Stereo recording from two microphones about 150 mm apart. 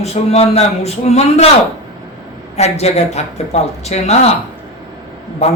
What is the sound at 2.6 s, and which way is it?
A man's voice, 45° left (ahead or behind).